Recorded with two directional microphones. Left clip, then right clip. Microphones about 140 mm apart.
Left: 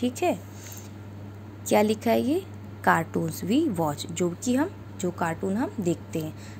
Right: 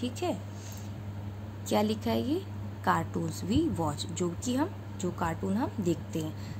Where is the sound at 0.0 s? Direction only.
45° left (ahead or behind).